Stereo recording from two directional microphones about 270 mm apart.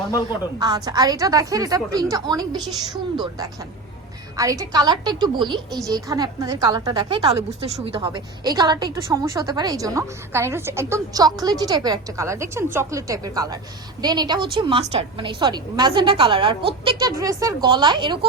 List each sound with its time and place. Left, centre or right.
0.1 s a woman's voice: centre
0.6 s a woman's voice: centre